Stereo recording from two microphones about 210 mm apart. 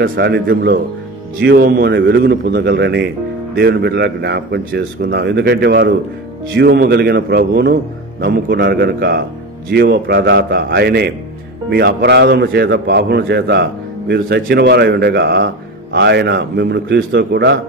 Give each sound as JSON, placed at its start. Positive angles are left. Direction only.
{"t": 0.1, "sound": "a man's voice", "side_deg": -50}